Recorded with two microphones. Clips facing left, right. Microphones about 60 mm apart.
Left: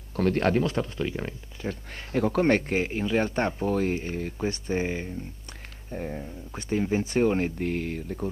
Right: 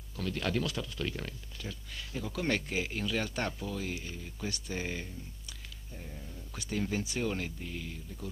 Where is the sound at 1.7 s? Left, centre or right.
Left.